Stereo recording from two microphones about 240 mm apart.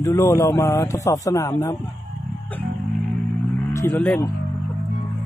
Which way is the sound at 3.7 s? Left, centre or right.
Centre.